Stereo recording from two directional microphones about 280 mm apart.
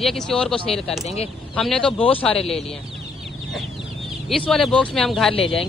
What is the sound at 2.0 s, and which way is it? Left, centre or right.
Speech, centre.